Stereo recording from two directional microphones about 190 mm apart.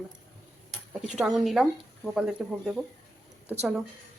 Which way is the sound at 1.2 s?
Centre (ahead or behind).